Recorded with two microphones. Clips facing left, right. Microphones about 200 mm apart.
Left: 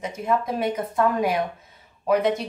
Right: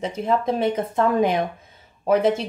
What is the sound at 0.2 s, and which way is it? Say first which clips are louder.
A woman's voice: right 3 dB; 30° right (ahead or behind).